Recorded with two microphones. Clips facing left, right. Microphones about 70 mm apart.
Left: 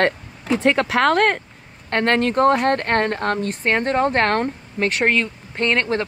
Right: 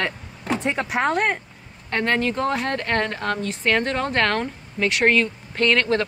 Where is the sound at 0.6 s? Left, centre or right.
Left.